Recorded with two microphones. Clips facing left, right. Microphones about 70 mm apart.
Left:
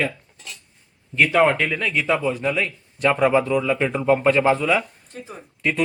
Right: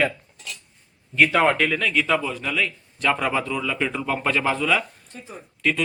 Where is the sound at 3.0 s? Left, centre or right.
Centre.